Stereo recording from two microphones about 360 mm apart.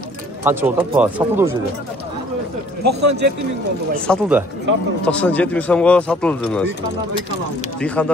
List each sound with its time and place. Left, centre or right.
0.4 s speech: centre
2.8 s a man's voice: right
4.1 s speech: centre
7.8 s speech: centre